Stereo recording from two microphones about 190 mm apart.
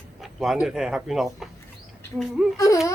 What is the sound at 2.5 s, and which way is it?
Speech, 15° left (ahead or behind).